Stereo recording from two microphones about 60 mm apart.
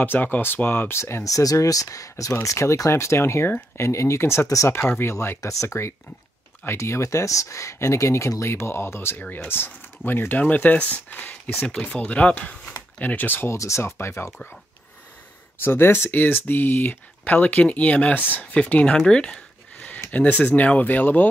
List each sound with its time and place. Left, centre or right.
0.0 s speech: left
0.9 s speech: left
1.2 s speech: left
2.4 s speech: left
5.4 s speech: left
13.5 s speech: left
15.6 s speech: left